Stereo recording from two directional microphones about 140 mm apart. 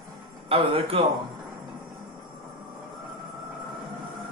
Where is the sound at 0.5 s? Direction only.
40° right (ahead or behind).